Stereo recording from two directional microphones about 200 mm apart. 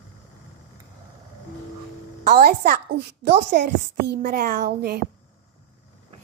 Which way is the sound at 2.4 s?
50° right (ahead or behind).